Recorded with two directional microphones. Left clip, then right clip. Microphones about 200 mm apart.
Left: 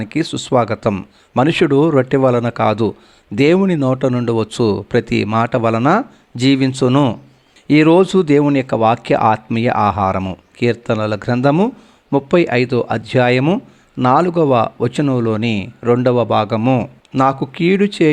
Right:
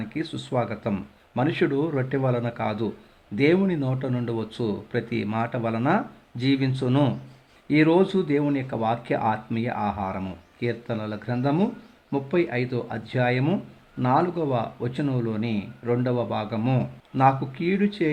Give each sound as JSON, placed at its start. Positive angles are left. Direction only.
{"t": 0.0, "sound": "speech", "side_deg": 35}